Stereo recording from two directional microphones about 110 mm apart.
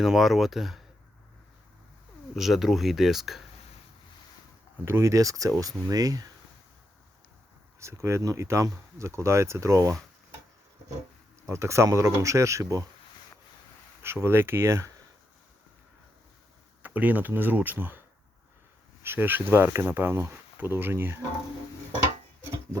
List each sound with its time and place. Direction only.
0.0 s speech: centre (ahead or behind)
2.3 s speech: centre (ahead or behind)
4.9 s speech: 25° right (ahead or behind)
7.8 s speech: 25° right (ahead or behind)
11.4 s speech: 25° right (ahead or behind)
14.0 s speech: 20° right (ahead or behind)
16.8 s speech: 15° right (ahead or behind)
19.0 s speech: 20° right (ahead or behind)